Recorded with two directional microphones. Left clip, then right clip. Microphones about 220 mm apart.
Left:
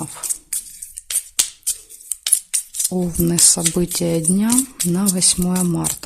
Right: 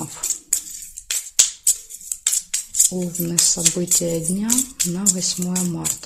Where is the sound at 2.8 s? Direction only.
35° left (ahead or behind).